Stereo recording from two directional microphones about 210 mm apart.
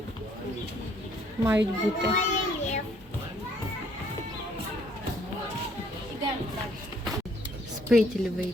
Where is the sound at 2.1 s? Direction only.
35° left (ahead or behind).